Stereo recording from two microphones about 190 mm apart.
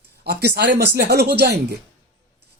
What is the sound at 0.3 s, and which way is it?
Speech, 60° right (ahead or behind).